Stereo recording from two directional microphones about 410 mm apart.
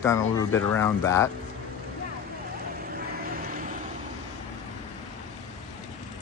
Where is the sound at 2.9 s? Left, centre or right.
Right.